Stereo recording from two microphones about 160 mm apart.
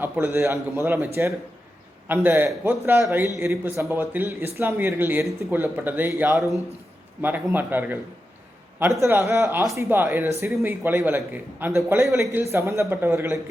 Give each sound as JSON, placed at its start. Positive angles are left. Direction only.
{"t": 0.0, "sound": "speech", "side_deg": -15}
{"t": 9.0, "sound": "speech", "side_deg": -15}